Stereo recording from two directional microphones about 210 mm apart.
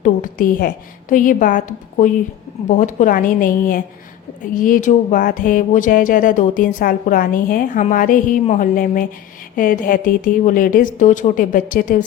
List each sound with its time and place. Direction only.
0.0 s a woman's voice: 40° left (ahead or behind)